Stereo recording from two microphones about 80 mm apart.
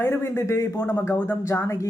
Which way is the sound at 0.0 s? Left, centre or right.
Left.